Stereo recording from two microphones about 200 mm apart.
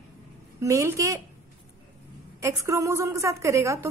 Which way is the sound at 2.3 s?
15° right (ahead or behind).